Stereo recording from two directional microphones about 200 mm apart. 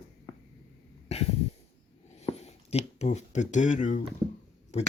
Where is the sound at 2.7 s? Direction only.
35° left (ahead or behind).